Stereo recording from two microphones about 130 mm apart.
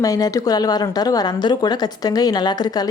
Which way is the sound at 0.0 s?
25° left (ahead or behind).